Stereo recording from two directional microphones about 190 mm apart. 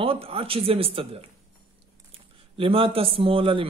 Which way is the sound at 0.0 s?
30° right (ahead or behind).